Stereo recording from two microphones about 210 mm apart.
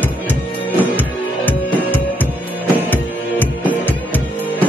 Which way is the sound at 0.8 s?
10° left (ahead or behind).